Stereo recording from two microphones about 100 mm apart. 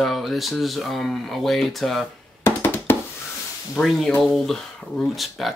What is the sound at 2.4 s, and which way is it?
Music, 25° left (ahead or behind).